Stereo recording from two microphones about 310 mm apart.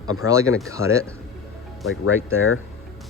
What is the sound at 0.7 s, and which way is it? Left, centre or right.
Speech, centre.